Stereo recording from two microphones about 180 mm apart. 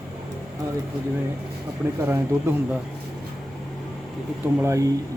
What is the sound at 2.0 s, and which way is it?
Speech, 10° right (ahead or behind).